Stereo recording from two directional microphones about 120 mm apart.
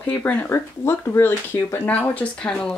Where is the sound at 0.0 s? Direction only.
15° left (ahead or behind).